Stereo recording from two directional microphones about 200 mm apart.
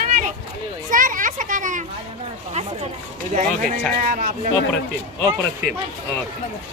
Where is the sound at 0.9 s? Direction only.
40° right (ahead or behind).